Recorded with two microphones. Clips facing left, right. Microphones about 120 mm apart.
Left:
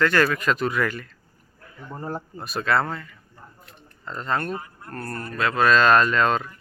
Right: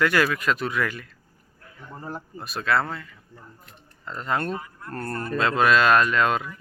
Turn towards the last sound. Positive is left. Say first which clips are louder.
# left 1 dB
turn(degrees=-5)  # may be behind; listen again after turning